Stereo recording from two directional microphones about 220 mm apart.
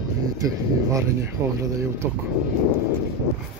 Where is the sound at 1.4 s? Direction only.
15° right (ahead or behind).